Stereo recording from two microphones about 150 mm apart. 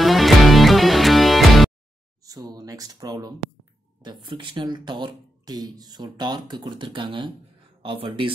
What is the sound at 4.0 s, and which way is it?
Speech, 30° right (ahead or behind).